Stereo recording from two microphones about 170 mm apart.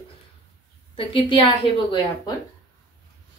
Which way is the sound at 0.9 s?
30° left (ahead or behind).